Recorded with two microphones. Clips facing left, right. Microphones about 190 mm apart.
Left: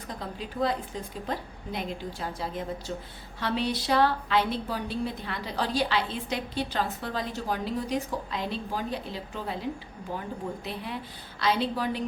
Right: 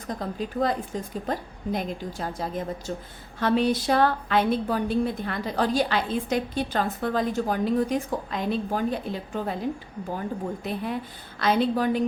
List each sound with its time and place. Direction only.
0.1 s a woman's voice: 45° right (ahead or behind)